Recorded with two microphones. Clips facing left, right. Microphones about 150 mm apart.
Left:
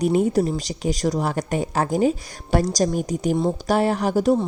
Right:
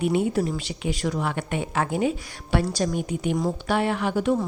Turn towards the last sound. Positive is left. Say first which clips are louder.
# left 4 dB
turn(degrees=40)  # may be behind; listen again after turning